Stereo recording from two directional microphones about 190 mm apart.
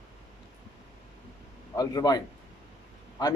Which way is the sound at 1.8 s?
20° left (ahead or behind).